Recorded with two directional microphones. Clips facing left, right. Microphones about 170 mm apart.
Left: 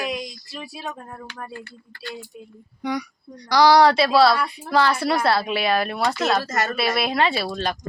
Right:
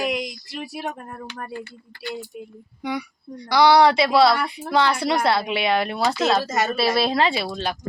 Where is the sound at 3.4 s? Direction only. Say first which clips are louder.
Even; 10° right (ahead or behind).